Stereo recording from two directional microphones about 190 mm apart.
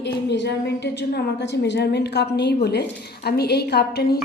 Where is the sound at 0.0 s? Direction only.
65° left (ahead or behind).